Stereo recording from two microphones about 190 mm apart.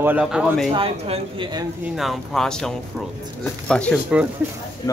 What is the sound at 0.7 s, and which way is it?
Speech, 30° right (ahead or behind).